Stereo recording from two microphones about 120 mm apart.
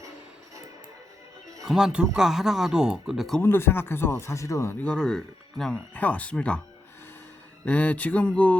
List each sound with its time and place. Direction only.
1.6 s speech: 5° right (ahead or behind)
3.4 s speech: 20° left (ahead or behind)
4.9 s speech: 5° left (ahead or behind)
7.6 s speech: 10° left (ahead or behind)